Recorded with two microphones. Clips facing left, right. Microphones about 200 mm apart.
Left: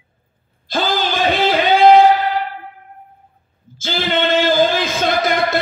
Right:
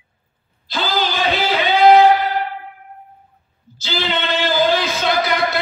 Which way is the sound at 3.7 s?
50° left (ahead or behind).